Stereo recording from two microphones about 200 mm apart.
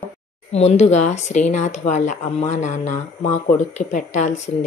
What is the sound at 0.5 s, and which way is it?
A woman's voice, 35° left (ahead or behind).